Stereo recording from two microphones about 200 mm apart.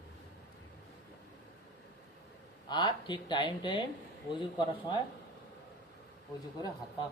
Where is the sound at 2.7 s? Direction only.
20° left (ahead or behind).